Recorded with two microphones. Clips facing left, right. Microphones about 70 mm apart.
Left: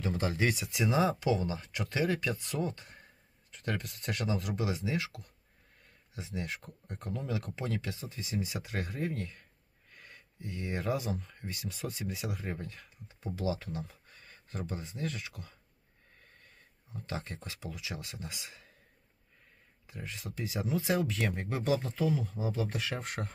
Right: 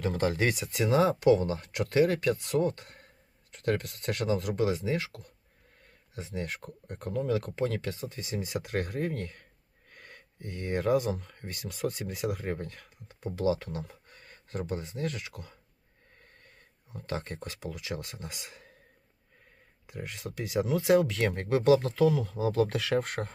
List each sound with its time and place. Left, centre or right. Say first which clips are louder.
0.0 s speech: right 4 dB; right
16.9 s speech: right 4 dB; right
19.9 s speech: right 4 dB; right
23.0 s speech: right 8 dB; right